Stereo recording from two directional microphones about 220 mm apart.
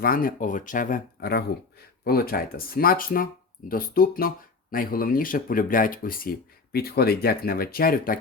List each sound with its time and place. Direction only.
0.0 s speech: 40° left (ahead or behind)